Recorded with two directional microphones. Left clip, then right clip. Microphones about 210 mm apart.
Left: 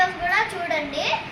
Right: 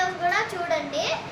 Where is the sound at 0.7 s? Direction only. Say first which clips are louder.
Left 1 dB; 15° right (ahead or behind).